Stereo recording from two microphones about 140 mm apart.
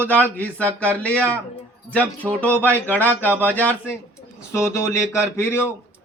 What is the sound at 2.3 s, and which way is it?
Speech, 10° left (ahead or behind).